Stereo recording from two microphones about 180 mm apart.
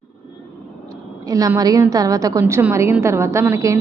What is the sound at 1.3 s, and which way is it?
A woman's voice, 20° right (ahead or behind).